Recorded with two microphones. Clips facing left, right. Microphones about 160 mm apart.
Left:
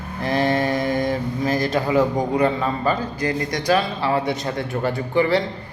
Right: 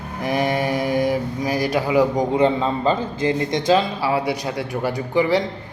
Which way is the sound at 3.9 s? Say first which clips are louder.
Even; 10° right (ahead or behind).